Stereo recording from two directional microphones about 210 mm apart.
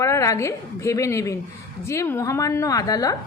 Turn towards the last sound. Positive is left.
turn(degrees=15)  # may be behind; listen again after turning